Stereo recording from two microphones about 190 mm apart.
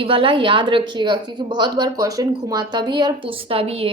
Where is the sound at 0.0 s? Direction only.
30° right (ahead or behind).